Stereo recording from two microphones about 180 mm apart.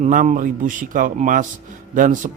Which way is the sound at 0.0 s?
45° right (ahead or behind).